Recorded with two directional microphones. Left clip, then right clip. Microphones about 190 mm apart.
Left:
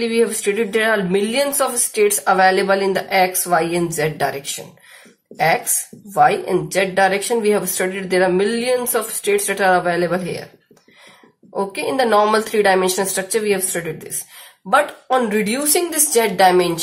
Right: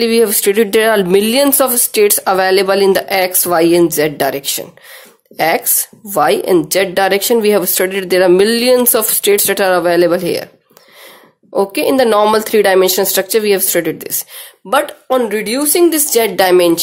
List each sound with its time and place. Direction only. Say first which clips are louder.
0.0 s speech: right 6 dB; 60° right (ahead or behind)
6.1 s speech: right 4 dB; 60° right (ahead or behind)
11.5 s speech: right 8 dB; 55° right (ahead or behind)